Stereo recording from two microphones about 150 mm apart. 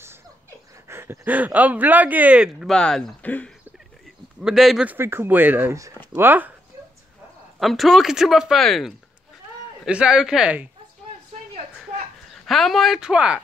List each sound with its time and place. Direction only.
0.8 s speech: 15° right (ahead or behind); by 3.5 s 10° left (ahead or behind)
4.4 s speech: 5° right (ahead or behind)
4.9 s speech: 15° right (ahead or behind)
7.5 s speech: centre (ahead or behind)
12.4 s speech: centre (ahead or behind)